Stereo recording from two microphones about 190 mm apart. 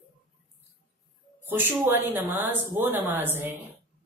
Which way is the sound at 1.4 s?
10° right (ahead or behind).